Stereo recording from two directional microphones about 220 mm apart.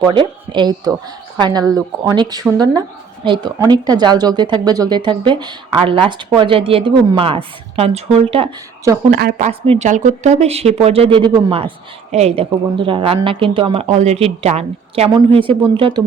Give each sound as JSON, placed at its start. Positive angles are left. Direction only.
{"t": 0.0, "sound": "speech", "side_deg": -20}
{"t": 9.0, "sound": "speech", "side_deg": -40}
{"t": 9.5, "sound": "speech", "side_deg": -30}